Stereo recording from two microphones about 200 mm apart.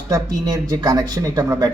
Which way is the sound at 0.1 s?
20° right (ahead or behind).